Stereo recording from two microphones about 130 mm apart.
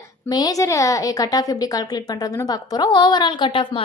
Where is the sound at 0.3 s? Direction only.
30° left (ahead or behind).